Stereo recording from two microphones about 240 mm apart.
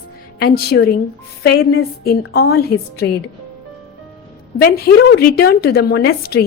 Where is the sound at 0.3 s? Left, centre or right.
Left.